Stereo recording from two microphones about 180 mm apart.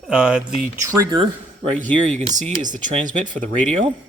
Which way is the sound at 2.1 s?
40° right (ahead or behind).